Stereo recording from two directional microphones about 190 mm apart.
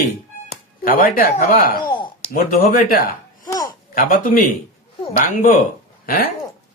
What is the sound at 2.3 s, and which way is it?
Speech, 45° left (ahead or behind).